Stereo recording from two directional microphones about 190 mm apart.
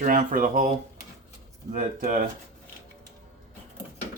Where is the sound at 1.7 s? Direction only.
40° right (ahead or behind).